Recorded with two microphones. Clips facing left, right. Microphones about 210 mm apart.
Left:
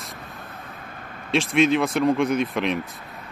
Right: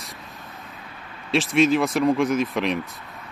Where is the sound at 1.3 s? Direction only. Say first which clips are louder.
Even; centre (ahead or behind).